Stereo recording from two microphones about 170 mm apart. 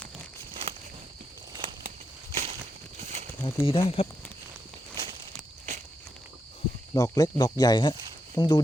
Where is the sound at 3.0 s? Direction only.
45° right (ahead or behind).